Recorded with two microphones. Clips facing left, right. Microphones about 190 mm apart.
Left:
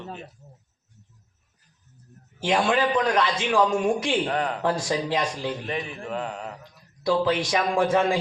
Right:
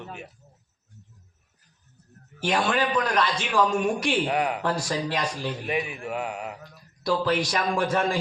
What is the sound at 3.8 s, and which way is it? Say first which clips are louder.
Speech: left 2 dB; 25° left (ahead or behind).